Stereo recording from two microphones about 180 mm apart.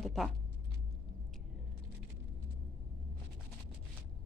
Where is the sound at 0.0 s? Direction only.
Centre (ahead or behind).